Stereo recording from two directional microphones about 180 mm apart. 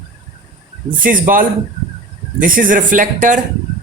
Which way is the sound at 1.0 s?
50° right (ahead or behind).